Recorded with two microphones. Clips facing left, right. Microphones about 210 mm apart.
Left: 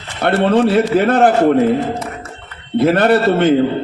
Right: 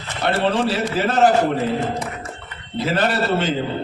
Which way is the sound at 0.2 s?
55° left (ahead or behind).